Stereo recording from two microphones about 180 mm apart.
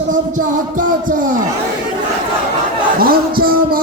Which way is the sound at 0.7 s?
50° right (ahead or behind).